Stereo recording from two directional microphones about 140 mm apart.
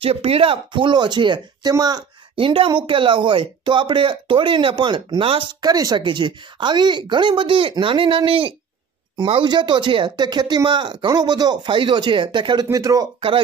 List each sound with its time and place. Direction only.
0.0 s speech: 45° right (ahead or behind); by 2.0 s 25° right (ahead or behind)
2.3 s speech: 40° right (ahead or behind)